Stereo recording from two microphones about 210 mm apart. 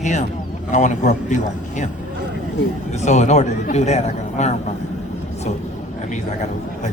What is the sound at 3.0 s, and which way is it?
A man's voice, 35° left (ahead or behind).